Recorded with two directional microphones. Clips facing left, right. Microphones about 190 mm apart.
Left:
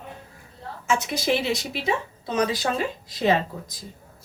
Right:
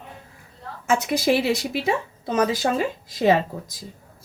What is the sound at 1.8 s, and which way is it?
Speech, 50° right (ahead or behind).